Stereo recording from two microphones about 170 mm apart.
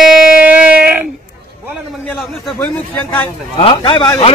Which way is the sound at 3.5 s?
30° left (ahead or behind).